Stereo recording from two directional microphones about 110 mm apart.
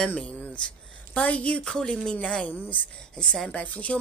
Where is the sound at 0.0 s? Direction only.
10° left (ahead or behind).